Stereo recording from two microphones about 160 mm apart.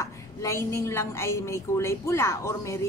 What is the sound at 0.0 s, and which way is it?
A woman's voice, 20° left (ahead or behind).